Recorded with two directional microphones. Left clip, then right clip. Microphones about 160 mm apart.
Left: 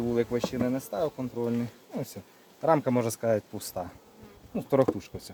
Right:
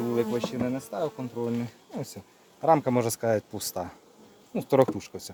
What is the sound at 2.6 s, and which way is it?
Speech, 35° right (ahead or behind).